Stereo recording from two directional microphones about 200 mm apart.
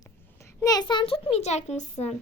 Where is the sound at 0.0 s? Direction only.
15° left (ahead or behind); by 2.1 s 35° left (ahead or behind).